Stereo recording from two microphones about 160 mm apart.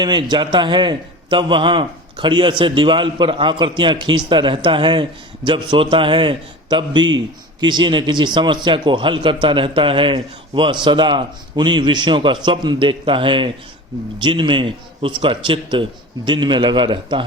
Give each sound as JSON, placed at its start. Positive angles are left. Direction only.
{"t": 0.0, "sound": "a man's voice", "side_deg": -25}